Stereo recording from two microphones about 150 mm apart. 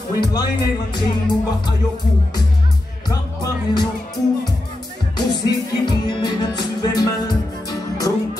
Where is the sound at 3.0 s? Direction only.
30° left (ahead or behind).